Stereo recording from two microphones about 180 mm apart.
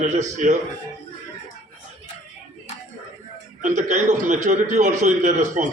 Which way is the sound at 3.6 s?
40° right (ahead or behind).